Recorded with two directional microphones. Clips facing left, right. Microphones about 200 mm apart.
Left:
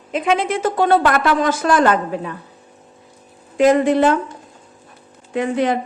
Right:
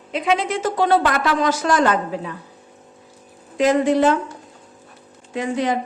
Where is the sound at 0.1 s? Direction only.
50° left (ahead or behind).